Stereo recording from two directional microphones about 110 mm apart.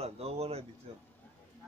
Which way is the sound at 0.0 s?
70° right (ahead or behind).